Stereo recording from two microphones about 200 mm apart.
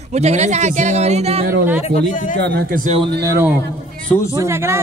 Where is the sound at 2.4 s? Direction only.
55° right (ahead or behind).